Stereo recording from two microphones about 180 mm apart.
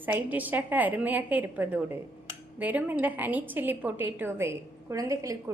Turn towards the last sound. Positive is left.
turn(degrees=-20)  # may be behind; listen again after turning